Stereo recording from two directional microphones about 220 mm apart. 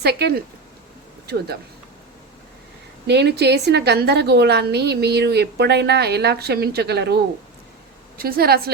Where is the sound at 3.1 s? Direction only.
50° right (ahead or behind).